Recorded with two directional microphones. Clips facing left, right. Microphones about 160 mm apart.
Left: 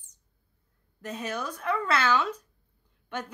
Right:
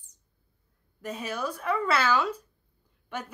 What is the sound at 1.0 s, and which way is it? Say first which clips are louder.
A woman's voice: right 1 dB; 10° right (ahead or behind).